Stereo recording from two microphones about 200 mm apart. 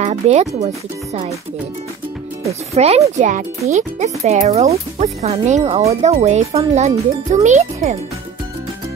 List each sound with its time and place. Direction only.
0.0 s speech: 35° right (ahead or behind)
2.7 s speech: 30° right (ahead or behind)